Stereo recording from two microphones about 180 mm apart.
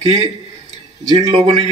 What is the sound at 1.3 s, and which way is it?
Speech, 35° right (ahead or behind).